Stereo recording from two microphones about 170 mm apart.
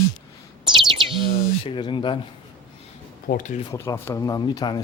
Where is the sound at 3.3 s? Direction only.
60° left (ahead or behind).